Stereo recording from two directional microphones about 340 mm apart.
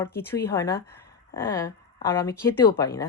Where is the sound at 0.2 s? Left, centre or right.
Centre.